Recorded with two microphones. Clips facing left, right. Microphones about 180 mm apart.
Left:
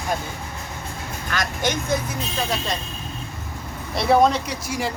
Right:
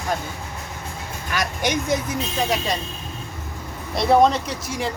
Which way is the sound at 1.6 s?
15° right (ahead or behind).